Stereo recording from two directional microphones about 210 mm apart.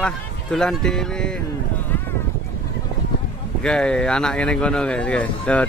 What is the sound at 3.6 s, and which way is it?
Speech, 5° left (ahead or behind).